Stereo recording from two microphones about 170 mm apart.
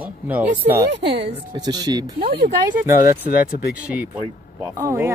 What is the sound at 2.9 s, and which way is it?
Speech, 50° left (ahead or behind).